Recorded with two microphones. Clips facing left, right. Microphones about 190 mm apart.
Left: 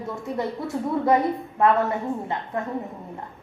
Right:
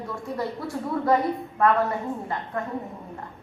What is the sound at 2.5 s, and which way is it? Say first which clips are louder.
Speech: left 2 dB; 25° left (ahead or behind).